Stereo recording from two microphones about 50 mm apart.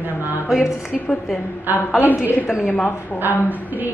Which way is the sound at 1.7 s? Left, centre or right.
Left.